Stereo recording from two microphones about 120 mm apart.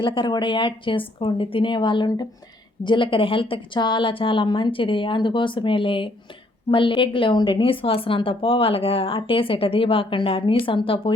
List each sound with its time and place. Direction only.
0.0 s a woman's voice: 45° left (ahead or behind)